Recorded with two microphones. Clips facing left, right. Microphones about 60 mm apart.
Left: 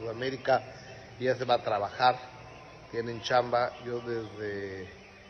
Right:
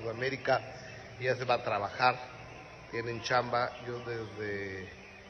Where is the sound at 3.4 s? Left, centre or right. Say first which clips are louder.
Left 5 dB; left.